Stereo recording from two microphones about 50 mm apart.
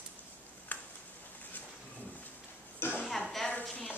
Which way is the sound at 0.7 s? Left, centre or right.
Left.